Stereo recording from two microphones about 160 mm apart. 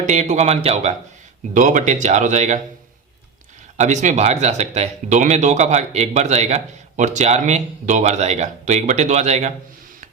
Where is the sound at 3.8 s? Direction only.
50° right (ahead or behind).